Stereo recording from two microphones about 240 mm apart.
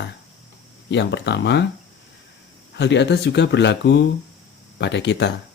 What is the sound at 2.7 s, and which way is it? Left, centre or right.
Speech, left.